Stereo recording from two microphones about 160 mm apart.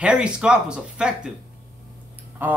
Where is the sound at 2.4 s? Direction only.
10° right (ahead or behind).